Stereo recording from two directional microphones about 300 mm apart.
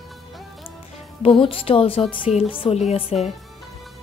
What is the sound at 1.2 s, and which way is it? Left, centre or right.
A woman's voice, centre.